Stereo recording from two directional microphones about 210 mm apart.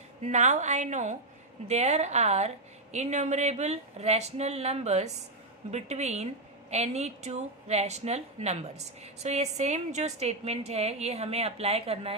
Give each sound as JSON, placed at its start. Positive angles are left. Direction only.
{"t": 0.2, "sound": "a woman's voice", "side_deg": -35}